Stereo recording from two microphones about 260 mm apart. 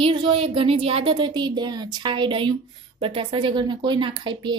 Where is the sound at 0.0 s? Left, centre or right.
Centre.